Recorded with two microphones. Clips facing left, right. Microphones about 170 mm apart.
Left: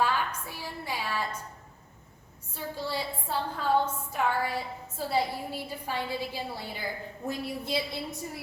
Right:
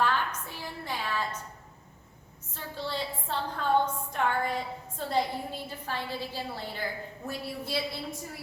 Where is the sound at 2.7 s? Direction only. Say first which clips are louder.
Even; 10° left (ahead or behind).